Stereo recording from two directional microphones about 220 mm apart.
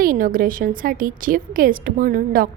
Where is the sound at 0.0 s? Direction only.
40° right (ahead or behind).